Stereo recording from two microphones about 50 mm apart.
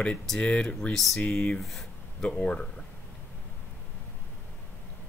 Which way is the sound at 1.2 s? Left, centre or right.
Left.